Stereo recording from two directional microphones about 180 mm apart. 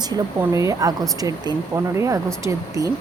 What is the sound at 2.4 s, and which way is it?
Speech, 20° right (ahead or behind).